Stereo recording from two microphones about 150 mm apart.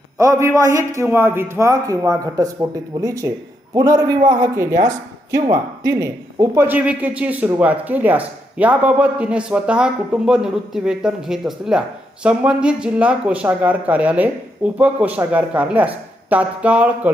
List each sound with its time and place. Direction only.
0.2 s a man's voice: 20° right (ahead or behind)
4.5 s a man's voice: 20° right (ahead or behind)